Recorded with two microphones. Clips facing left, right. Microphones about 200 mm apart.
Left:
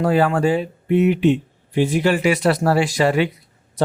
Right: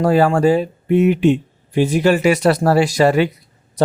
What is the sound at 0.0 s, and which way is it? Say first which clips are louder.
Speech: right 3 dB; 40° right (ahead or behind).